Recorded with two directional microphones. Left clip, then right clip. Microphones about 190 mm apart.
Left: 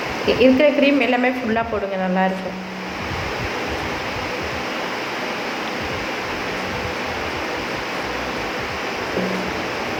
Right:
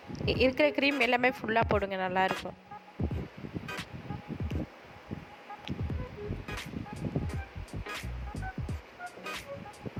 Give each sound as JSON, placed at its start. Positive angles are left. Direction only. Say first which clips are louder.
{"t": 0.3, "sound": "speech", "louder": "left 12 dB", "side_deg": -55}